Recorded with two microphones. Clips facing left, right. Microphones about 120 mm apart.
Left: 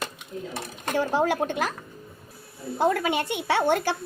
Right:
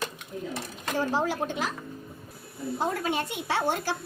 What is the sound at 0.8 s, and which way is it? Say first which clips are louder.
Speech: left 4 dB; 60° left (ahead or behind).